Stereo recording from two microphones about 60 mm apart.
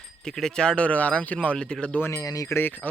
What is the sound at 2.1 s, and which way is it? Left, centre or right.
Speech, left.